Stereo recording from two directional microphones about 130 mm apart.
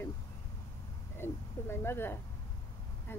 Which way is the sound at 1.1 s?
20° left (ahead or behind).